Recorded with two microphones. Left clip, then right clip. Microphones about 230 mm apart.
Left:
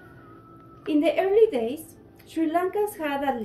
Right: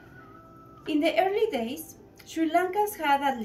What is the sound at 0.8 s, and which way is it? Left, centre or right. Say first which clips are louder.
A woman's voice: left 2 dB; centre.